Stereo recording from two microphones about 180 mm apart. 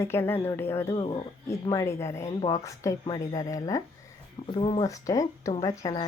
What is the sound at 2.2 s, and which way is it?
Speech, 35° left (ahead or behind).